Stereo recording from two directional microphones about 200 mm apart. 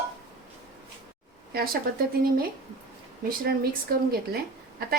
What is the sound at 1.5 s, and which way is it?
Speech, 50° right (ahead or behind).